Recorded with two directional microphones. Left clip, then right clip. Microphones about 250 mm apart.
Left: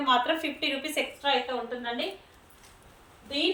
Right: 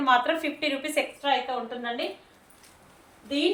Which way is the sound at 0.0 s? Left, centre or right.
Centre.